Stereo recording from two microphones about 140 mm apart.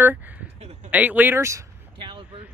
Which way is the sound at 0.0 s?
15° right (ahead or behind).